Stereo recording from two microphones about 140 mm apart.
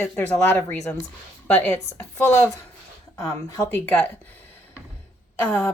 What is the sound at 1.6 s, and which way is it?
Speech, 20° left (ahead or behind).